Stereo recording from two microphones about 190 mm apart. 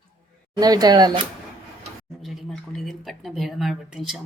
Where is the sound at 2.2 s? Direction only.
Centre (ahead or behind).